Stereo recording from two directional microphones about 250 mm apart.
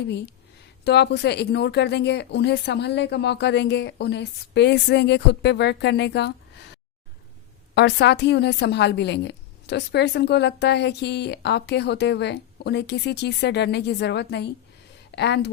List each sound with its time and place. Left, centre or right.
0.9 s a woman's voice: left
7.8 s a woman's voice: left